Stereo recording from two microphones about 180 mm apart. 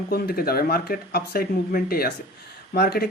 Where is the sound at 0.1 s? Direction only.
55° left (ahead or behind).